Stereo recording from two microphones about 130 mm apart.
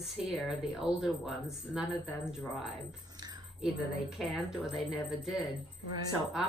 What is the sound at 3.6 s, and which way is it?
A woman's voice, 5° right (ahead or behind).